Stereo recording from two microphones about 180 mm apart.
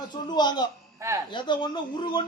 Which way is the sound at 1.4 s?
25° left (ahead or behind).